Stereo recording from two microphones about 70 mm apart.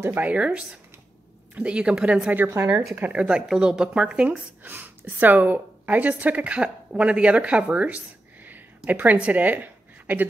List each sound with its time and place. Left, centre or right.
0.0 s a woman's voice: right
2.3 s a woman's voice: right
3.0 s speech: centre
4.6 s a woman's voice: right
8.5 s a sound: right